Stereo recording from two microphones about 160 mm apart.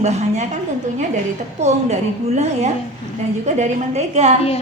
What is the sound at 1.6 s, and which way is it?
A woman's voice, 45° right (ahead or behind).